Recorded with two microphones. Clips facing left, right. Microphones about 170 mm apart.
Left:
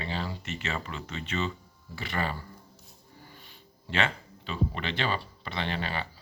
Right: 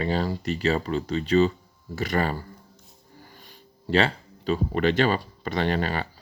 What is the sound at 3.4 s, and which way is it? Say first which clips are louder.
Speech: right 3 dB; 40° right (ahead or behind).